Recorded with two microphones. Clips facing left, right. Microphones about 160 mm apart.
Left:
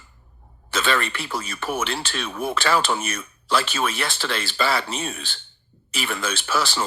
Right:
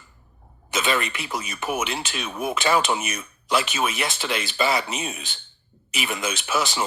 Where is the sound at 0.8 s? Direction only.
15° right (ahead or behind).